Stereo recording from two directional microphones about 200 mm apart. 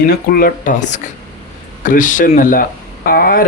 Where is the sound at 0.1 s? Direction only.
45° left (ahead or behind).